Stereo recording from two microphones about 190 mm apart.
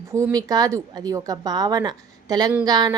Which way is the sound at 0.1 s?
15° right (ahead or behind).